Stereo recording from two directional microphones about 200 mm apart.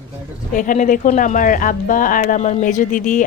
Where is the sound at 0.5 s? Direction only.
40° left (ahead or behind).